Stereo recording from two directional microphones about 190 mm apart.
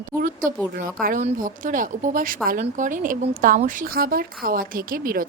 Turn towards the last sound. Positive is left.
turn(degrees=-50)  # may be behind; listen again after turning